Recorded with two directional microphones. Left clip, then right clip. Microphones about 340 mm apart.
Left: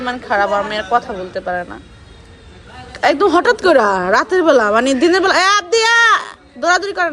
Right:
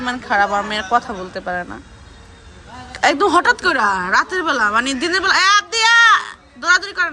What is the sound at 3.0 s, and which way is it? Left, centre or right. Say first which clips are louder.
Speech: left 2 dB; centre.